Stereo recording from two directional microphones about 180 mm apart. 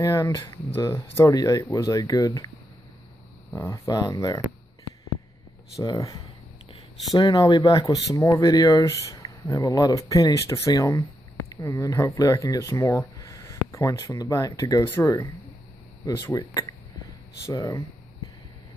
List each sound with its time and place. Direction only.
0.0 s speech: 15° left (ahead or behind)
3.5 s speech: 15° left (ahead or behind)
5.8 s speech: 20° left (ahead or behind)